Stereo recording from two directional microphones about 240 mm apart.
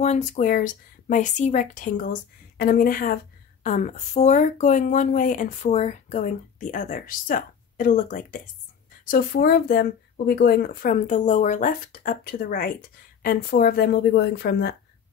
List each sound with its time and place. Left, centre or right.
0.0 s speech: left